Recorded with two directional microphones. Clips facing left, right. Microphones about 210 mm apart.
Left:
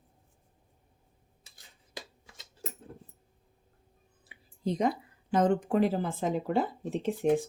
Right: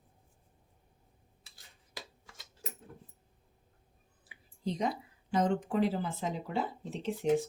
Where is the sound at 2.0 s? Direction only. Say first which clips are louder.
Left 3 dB; 25° left (ahead or behind).